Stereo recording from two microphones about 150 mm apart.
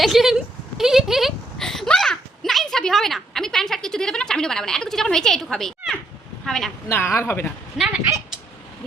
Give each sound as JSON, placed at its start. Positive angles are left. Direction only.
{"t": 0.0, "sound": "a sound", "side_deg": 0}
{"t": 6.4, "sound": "speech", "side_deg": 0}
{"t": 6.8, "sound": "speech", "side_deg": 15}
{"t": 7.8, "sound": "speech", "side_deg": 0}